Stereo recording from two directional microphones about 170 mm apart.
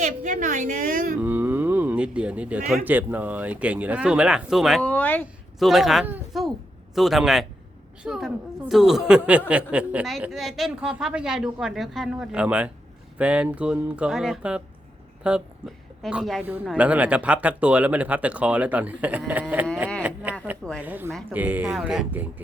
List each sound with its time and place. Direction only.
0.0 s a woman's voice: 50° right (ahead or behind)
1.2 s a sound: 10° right (ahead or behind)
2.6 s speech: 10° right (ahead or behind)
20.0 s a sound: 10° right (ahead or behind)
20.8 s speech: 10° right (ahead or behind)
21.1 s speech: centre (ahead or behind)
21.3 s speech: 10° right (ahead or behind)